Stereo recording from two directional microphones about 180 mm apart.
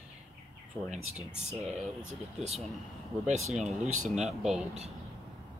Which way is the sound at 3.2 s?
40° right (ahead or behind).